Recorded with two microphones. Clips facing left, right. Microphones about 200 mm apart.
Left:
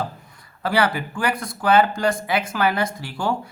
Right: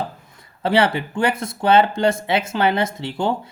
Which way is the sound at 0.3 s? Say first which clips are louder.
Right 3 dB; 25° right (ahead or behind).